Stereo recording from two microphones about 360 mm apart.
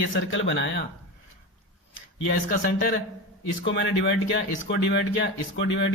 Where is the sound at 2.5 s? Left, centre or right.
Left.